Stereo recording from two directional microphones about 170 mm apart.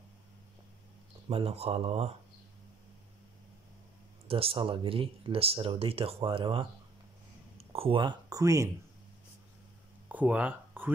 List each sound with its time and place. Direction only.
1.3 s speech: 35° right (ahead or behind)
4.3 s speech: 35° right (ahead or behind)
10.0 s a sound: 10° right (ahead or behind)